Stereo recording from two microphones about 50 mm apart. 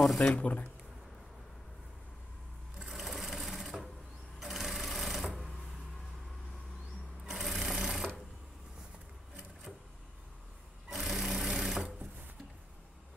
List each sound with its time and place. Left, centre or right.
0.0 s speech: centre
0.3 s speech: left
2.8 s sewing machine: centre
7.2 s sewing machine: centre
10.9 s sewing machine: centre